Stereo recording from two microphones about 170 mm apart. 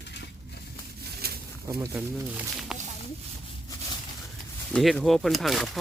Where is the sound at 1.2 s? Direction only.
65° right (ahead or behind).